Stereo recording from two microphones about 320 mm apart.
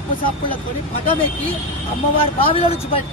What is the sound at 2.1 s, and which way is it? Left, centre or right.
Speech, centre.